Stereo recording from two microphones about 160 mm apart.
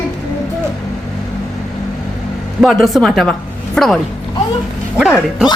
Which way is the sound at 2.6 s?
Centre (ahead or behind).